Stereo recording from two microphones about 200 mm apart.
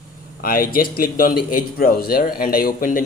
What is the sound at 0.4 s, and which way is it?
A man's voice, 45° left (ahead or behind).